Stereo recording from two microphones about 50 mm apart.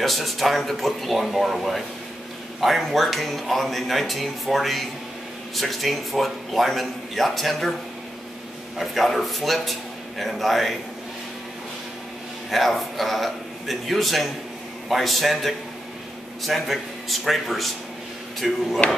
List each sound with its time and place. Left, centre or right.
0.0 s speech: centre
8.7 s a man's voice: centre
12.4 s speech: centre
18.8 s speech: left